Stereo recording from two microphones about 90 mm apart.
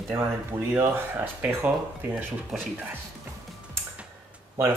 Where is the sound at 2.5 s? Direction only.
Centre (ahead or behind).